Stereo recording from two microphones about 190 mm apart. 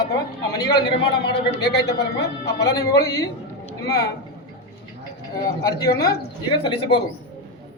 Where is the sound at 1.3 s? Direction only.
60° left (ahead or behind).